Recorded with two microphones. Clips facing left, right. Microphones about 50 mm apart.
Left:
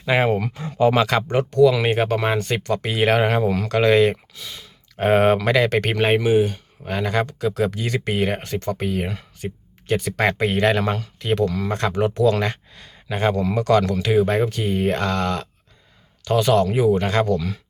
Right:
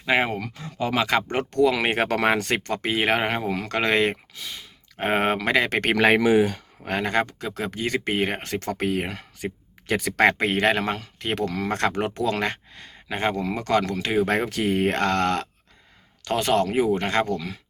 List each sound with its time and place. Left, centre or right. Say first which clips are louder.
0.0 s speech: left 2 dB; centre
1.3 s speech: left 5 dB; right
2.0 s speech: even; right
2.6 s speech: left 5 dB; right
3.7 s speech: left 5 dB; right
5.9 s speech: right 1 dB; right
7.0 s speech: left 4 dB; right
8.4 s speech: left 2 dB; right
11.2 s speech: left 6 dB; right
14.3 s speech: left 2 dB; right
16.2 s speech: left 4 dB; right